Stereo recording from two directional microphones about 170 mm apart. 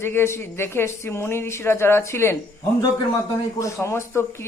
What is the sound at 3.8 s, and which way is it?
Speech, 15° left (ahead or behind).